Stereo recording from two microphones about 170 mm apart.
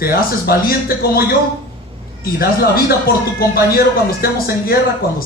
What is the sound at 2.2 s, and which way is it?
A man's voice, 60° left (ahead or behind).